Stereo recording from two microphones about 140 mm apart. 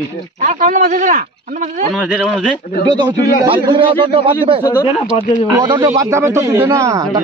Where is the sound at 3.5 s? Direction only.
35° right (ahead or behind).